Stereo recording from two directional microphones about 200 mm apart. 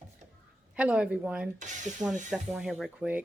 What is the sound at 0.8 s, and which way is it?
Speech, 5° right (ahead or behind).